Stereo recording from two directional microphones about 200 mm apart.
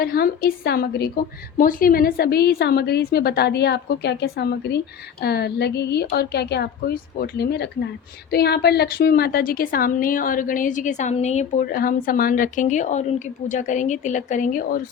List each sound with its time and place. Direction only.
0.0 s a woman's voice: 45° left (ahead or behind)